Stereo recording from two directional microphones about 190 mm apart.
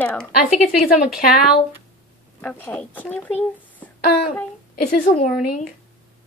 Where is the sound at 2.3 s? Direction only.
10° left (ahead or behind).